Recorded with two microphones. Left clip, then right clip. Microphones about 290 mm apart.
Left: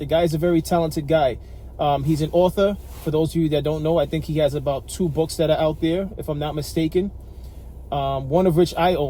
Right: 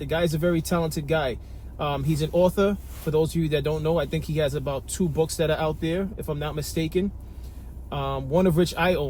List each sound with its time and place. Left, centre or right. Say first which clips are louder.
0.0 s speech: left 5 dB; left